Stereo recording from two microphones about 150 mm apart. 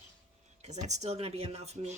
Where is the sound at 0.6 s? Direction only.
50° right (ahead or behind).